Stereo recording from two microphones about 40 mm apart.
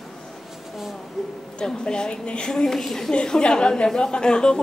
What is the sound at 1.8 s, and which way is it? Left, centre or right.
Speech, left.